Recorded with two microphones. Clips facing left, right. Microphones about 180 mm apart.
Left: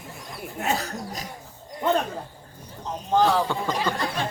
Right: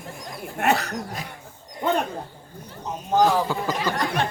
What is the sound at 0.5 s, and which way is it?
Speech, 70° right (ahead or behind).